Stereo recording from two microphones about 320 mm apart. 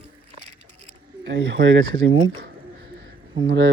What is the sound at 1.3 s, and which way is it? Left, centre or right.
Speech, right.